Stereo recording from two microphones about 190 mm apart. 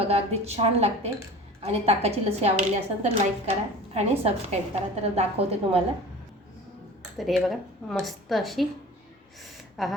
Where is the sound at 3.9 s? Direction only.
35° right (ahead or behind).